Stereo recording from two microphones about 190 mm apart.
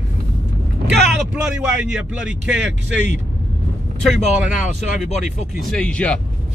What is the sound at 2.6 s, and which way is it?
Speech, 65° right (ahead or behind).